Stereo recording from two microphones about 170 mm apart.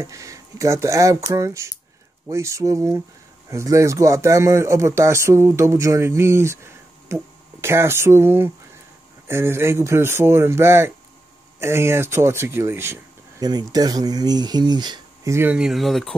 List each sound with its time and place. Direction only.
0.0 s speech: 20° right (ahead or behind); by 16.2 s centre (ahead or behind)